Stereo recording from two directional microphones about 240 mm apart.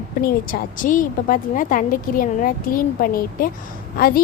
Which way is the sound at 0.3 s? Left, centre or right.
Left.